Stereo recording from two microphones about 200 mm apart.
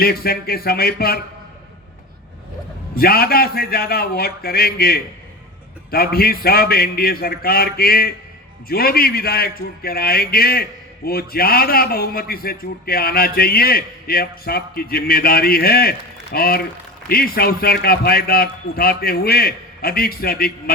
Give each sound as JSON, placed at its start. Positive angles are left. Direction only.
{"t": 0.0, "sound": "a man's voice", "side_deg": 50}
{"t": 2.9, "sound": "a man's voice", "side_deg": 50}